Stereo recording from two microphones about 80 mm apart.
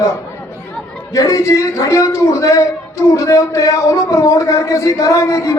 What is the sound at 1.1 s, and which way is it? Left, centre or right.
A man's voice, left.